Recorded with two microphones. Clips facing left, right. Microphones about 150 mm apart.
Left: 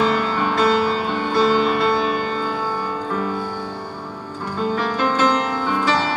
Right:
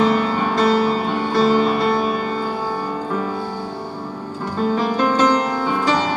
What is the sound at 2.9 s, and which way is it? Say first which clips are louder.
Music: right 1 dB; 20° right (ahead or behind).